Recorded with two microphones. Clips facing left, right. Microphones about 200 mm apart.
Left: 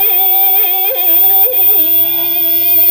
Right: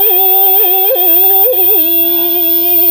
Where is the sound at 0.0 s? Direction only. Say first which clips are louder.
Right 7 dB; 15° left (ahead or behind).